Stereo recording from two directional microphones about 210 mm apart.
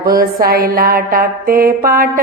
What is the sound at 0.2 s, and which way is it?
Music, 45° right (ahead or behind).